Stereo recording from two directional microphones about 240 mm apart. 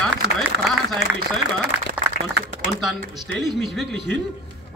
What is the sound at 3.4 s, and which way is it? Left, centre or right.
Speech, centre.